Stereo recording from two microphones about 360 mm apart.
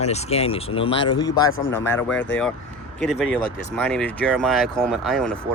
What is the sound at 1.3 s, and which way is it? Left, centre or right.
Speech, left.